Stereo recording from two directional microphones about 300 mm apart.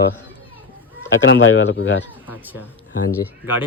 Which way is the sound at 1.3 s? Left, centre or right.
Left.